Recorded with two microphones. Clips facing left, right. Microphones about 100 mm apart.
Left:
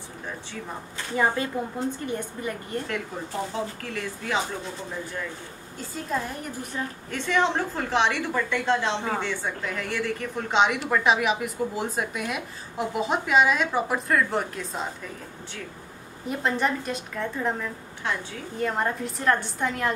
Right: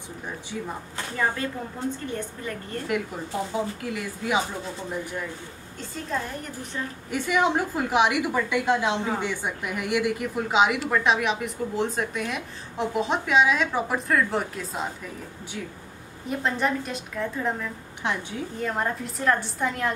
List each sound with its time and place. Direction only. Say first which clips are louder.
1.1 s a woman's voice: left 3 dB; 20° left (ahead or behind)
3.5 s speech: right 2 dB; 10° right (ahead or behind)
5.8 s a woman's voice: left 1 dB; 5° left (ahead or behind)
7.1 s a woman's voice: right 1 dB; 10° right (ahead or behind)
16.3 s a woman's voice: even; centre (ahead or behind)
18.0 s a woman's voice: right 1 dB; 20° right (ahead or behind)
18.6 s a woman's voice: left 2 dB; centre (ahead or behind)